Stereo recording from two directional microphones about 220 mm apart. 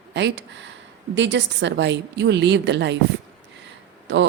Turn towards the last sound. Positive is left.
turn(degrees=-55)  # may be behind; listen again after turning